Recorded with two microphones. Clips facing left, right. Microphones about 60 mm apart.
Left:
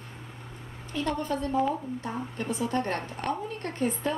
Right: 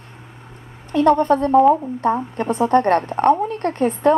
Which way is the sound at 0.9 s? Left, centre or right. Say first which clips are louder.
Right 15 dB; right.